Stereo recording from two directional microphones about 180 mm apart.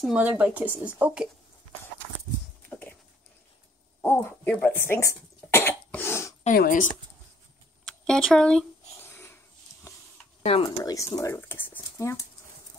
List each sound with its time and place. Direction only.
0.0 s speech: 5° right (ahead or behind)
2.7 s dog: 10° left (ahead or behind)
4.0 s cough: 15° left (ahead or behind)
6.4 s speech: 50° left (ahead or behind)
7.8 s a sound: centre (ahead or behind)
10.4 s speech: 30° left (ahead or behind)
10.8 s speech: 20° left (ahead or behind)